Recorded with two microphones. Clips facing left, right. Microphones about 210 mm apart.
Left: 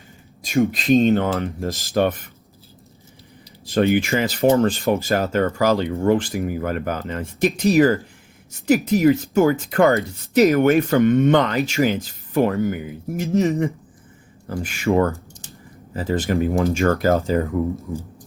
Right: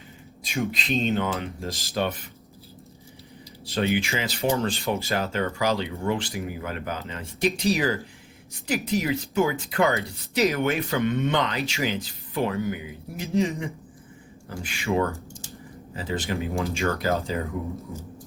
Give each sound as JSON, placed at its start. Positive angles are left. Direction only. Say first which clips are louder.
{"t": 0.7, "sound": "speech", "louder": "left 10 dB", "side_deg": 50}
{"t": 3.7, "sound": "speech", "louder": "left 7 dB", "side_deg": 50}